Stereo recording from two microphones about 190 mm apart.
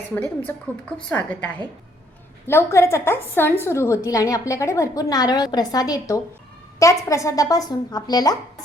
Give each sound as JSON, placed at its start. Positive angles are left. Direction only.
{"t": 0.1, "sound": "a woman's voice", "side_deg": 10}
{"t": 2.5, "sound": "a woman's voice", "side_deg": 15}